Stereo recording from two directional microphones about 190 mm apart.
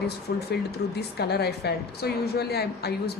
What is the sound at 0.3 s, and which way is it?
A woman's voice, 55° left (ahead or behind).